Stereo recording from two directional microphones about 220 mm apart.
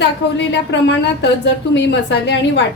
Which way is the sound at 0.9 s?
50° left (ahead or behind).